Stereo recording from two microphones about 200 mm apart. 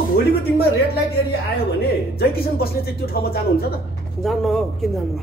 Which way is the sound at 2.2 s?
50° left (ahead or behind).